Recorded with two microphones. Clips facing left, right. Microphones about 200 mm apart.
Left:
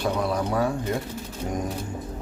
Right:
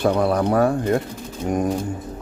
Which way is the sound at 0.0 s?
60° right (ahead or behind).